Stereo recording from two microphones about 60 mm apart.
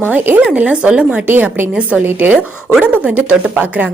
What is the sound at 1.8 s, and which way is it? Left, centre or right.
A woman's voice, right.